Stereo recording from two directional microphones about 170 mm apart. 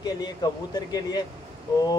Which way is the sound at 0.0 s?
25° left (ahead or behind).